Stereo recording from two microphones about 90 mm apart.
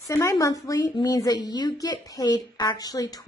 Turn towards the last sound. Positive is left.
turn(degrees=45)  # may be behind; listen again after turning